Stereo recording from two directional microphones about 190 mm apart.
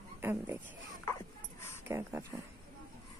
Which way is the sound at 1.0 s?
10° left (ahead or behind).